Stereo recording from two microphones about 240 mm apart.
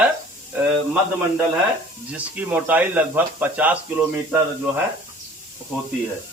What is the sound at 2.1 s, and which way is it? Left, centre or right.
Speech, centre.